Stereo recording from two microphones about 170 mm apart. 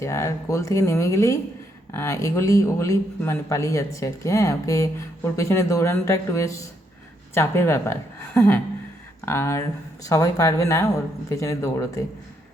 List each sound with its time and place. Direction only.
0.0 s a man's voice: 15° left (ahead or behind)